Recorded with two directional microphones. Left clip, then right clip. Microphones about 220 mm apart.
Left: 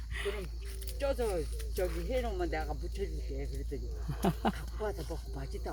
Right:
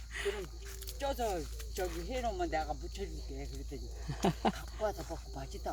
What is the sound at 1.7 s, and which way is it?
Speech, 50° right (ahead or behind).